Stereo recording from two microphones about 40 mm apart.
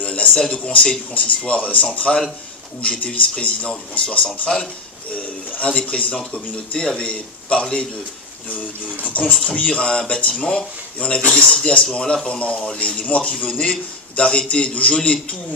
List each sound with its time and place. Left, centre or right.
0.0 s a sound: left
0.4 s a man's voice: left
5.6 s a man's voice: left
9.0 s a man's voice: left